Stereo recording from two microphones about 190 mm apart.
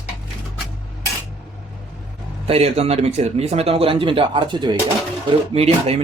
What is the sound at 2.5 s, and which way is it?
Speech, 30° right (ahead or behind).